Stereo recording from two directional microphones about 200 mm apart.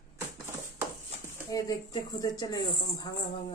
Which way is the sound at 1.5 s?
20° left (ahead or behind).